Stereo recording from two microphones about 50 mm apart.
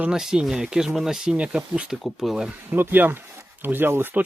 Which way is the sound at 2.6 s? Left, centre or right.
Right.